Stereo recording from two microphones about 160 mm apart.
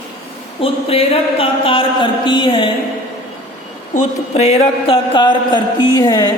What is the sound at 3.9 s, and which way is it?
A man's voice, 45° left (ahead or behind).